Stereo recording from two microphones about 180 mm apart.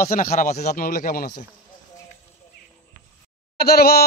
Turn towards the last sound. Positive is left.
turn(degrees=60)  # may be behind; listen again after turning